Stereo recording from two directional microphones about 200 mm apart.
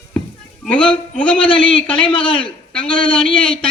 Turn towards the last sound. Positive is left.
turn(degrees=5)  # may be behind; listen again after turning